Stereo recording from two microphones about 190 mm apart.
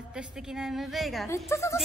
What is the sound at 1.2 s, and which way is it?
Speech, 15° left (ahead or behind).